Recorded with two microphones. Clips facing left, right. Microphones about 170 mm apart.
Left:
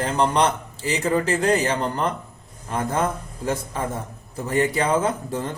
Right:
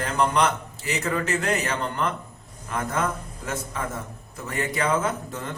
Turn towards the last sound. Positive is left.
turn(degrees=35)  # may be behind; listen again after turning